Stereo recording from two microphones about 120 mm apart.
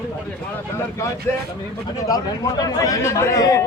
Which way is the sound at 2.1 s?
35° left (ahead or behind).